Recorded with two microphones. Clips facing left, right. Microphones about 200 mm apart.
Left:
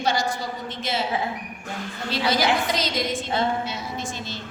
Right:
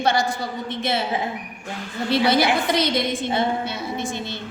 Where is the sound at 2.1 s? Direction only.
60° right (ahead or behind).